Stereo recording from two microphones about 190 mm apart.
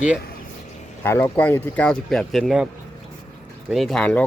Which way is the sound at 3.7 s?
Centre (ahead or behind).